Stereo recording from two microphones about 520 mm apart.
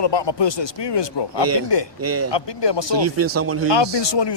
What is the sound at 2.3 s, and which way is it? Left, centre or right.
Speech, left.